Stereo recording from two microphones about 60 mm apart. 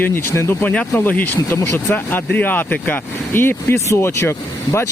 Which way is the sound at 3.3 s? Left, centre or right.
Left.